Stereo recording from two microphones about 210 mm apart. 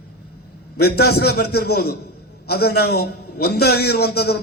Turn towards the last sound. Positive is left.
turn(degrees=50)  # may be behind; listen again after turning